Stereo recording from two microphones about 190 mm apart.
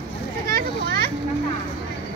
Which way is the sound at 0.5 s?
55° right (ahead or behind).